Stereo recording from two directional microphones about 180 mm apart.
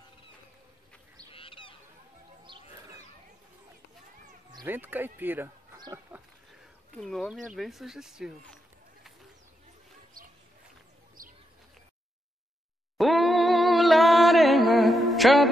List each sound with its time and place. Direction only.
1.3 s goose: 30° left (ahead or behind)
4.6 s speech: 10° right (ahead or behind)
7.0 s speech: centre (ahead or behind)
11.2 s bird: 50° right (ahead or behind)
12.9 s a sound: centre (ahead or behind)